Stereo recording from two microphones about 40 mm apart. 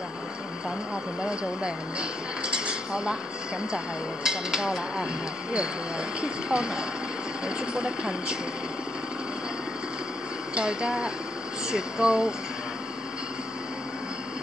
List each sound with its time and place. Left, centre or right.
1.2 s speech: right
6.2 s speech: centre
10.5 s speech: right